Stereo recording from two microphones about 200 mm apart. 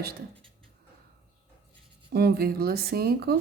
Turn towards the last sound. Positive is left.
turn(degrees=-50)  # may be behind; listen again after turning